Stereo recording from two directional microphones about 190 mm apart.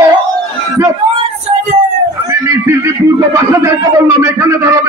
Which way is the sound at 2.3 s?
15° right (ahead or behind).